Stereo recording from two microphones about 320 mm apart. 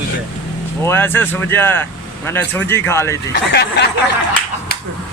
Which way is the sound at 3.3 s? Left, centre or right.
Left.